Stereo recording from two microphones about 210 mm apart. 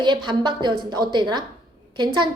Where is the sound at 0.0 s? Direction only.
20° right (ahead or behind).